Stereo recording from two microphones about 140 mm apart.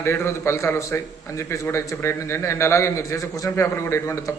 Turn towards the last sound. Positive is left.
turn(degrees=20)  # may be behind; listen again after turning